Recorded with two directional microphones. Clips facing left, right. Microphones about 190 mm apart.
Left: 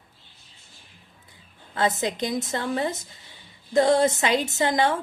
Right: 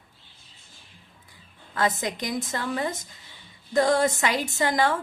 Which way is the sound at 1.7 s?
25° left (ahead or behind).